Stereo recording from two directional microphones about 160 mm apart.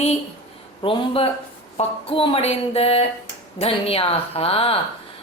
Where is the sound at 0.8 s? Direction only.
35° left (ahead or behind).